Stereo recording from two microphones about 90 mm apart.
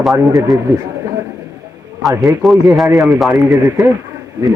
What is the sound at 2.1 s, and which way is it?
Speech, 40° right (ahead or behind).